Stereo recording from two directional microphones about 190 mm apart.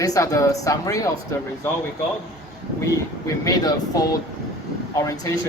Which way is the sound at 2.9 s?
20° left (ahead or behind).